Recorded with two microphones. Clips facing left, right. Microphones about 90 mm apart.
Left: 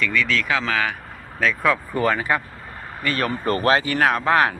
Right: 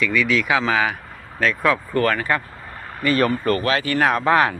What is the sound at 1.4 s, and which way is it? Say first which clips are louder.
Speech: right 1 dB; centre (ahead or behind).